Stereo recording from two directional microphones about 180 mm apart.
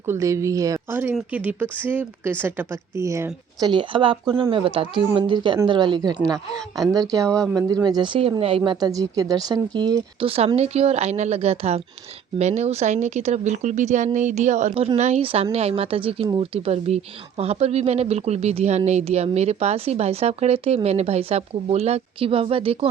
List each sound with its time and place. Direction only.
0.0 s speech: 15° right (ahead or behind)
7.3 s speech: 5° left (ahead or behind)
7.5 s speech: 20° right (ahead or behind)